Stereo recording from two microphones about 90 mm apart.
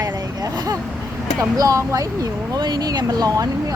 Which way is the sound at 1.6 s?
40° right (ahead or behind).